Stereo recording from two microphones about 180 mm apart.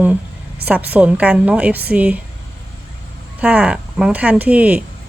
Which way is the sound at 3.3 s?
5° right (ahead or behind).